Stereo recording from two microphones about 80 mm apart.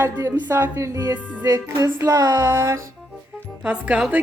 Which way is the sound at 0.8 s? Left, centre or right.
Right.